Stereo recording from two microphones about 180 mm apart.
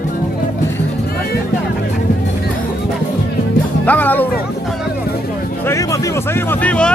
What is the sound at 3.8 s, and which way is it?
Speech, 10° left (ahead or behind).